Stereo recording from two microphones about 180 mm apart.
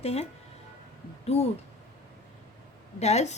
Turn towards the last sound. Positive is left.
turn(degrees=40)  # may be behind; listen again after turning